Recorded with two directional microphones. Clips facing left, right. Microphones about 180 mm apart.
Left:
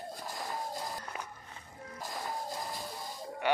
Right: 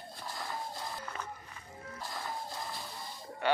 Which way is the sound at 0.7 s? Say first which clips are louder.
Left 3 dB; 40° left (ahead or behind).